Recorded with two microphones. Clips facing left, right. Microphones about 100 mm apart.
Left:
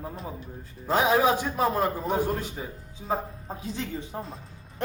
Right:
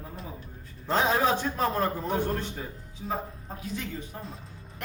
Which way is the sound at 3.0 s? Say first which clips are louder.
Left 4 dB; 35° left (ahead or behind).